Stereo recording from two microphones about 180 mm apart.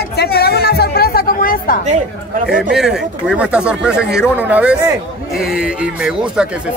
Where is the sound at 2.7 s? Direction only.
5° right (ahead or behind).